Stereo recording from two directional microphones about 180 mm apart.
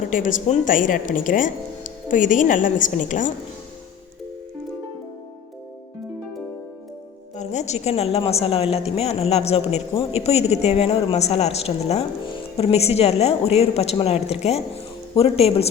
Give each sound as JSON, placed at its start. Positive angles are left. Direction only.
{"t": 0.1, "sound": "speech", "side_deg": 45}
{"t": 7.3, "sound": "a woman's voice", "side_deg": 40}